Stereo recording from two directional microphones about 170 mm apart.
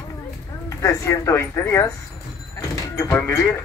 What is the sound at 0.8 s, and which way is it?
Speech, 15° left (ahead or behind).